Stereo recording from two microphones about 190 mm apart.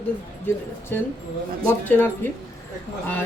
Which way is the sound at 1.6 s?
10° left (ahead or behind).